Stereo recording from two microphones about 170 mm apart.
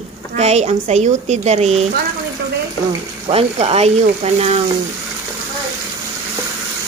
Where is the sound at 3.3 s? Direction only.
35° right (ahead or behind).